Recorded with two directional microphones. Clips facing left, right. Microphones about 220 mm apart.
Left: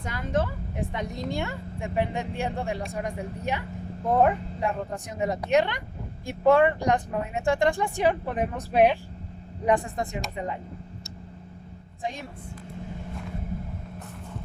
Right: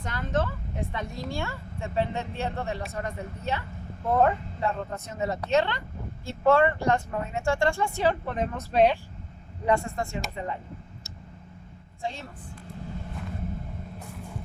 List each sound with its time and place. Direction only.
0.0 s a woman's voice: 10° left (ahead or behind)
12.0 s speech: 15° left (ahead or behind)